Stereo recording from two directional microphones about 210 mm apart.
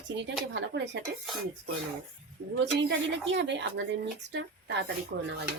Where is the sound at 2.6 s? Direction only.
55° right (ahead or behind).